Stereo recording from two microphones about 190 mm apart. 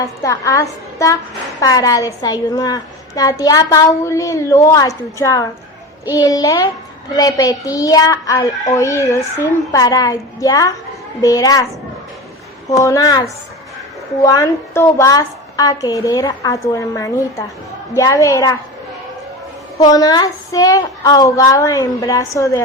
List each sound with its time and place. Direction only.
0.0 s a woman's voice: 15° left (ahead or behind)
19.8 s a woman's voice: 20° left (ahead or behind)